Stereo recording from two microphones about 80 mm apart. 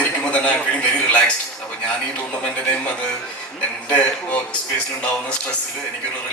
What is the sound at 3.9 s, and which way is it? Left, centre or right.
Speech, centre.